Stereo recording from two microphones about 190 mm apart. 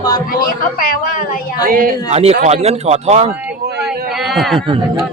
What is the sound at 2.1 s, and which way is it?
Speech, 35° right (ahead or behind).